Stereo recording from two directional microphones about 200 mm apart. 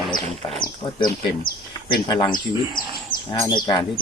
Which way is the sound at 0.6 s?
20° left (ahead or behind).